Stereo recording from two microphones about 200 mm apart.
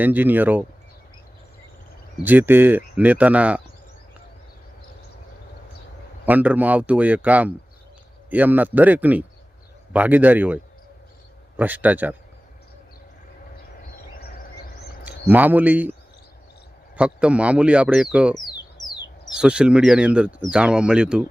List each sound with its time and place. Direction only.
0.0 s speech: 10° right (ahead or behind)
2.2 s speech: 10° right (ahead or behind)
6.2 s speech: 10° right (ahead or behind)
14.1 s a sound: 50° left (ahead or behind)
15.0 s speech: 10° right (ahead or behind)
17.0 s speech: 5° right (ahead or behind)
18.3 s a sound: 20° left (ahead or behind)
19.3 s speech: 5° right (ahead or behind)